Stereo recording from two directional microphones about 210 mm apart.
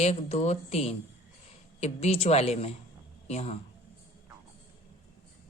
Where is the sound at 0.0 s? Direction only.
30° left (ahead or behind).